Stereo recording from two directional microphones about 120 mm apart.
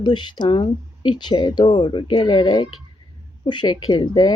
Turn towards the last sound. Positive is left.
turn(degrees=40)  # may be behind; listen again after turning